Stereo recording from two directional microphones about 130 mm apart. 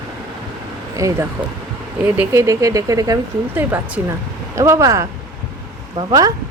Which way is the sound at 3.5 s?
15° right (ahead or behind).